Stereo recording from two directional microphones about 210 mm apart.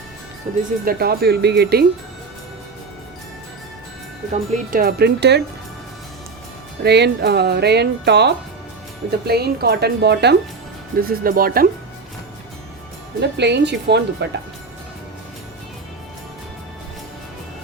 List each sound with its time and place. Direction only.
0.5 s speech: 35° right (ahead or behind)
0.9 s speech: 45° right (ahead or behind)
4.3 s speech: 45° right (ahead or behind)
6.8 s speech: 50° right (ahead or behind)
13.3 s speech: 55° right (ahead or behind)